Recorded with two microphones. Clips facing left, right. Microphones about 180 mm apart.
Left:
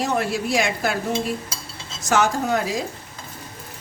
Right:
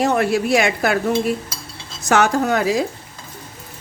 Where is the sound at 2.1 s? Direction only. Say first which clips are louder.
Right 4 dB; 65° right (ahead or behind).